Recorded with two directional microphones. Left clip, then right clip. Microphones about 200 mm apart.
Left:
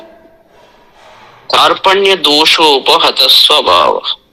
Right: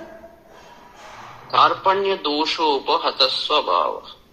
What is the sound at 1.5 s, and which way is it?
A man's voice, 85° left.